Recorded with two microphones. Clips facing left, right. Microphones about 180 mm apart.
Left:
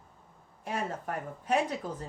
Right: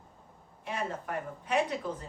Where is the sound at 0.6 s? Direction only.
45° left (ahead or behind).